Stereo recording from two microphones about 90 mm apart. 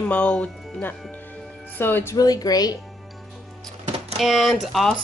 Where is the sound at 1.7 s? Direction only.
25° left (ahead or behind).